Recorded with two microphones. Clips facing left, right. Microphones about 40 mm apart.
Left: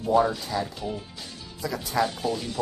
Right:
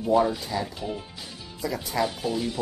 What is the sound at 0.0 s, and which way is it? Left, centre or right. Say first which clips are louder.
Speech: even; centre.